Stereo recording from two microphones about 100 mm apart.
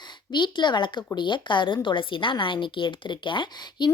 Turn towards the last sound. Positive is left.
turn(degrees=55)  # may be behind; listen again after turning